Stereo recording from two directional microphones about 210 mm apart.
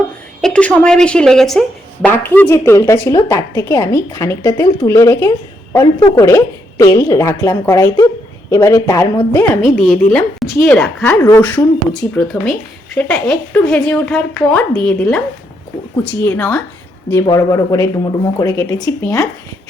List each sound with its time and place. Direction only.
0.4 s a woman's voice: 5° left (ahead or behind)
9.7 s a woman's voice: centre (ahead or behind)
16.2 s a woman's voice: 10° left (ahead or behind)